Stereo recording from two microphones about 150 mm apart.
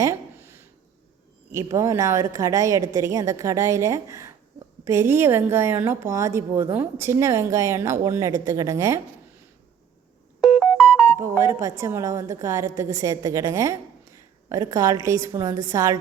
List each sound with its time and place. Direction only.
0.0 s a sound: 15° right (ahead or behind)
1.5 s a woman's voice: 20° right (ahead or behind)
10.4 s music: centre (ahead or behind)
11.2 s a woman's voice: 20° right (ahead or behind)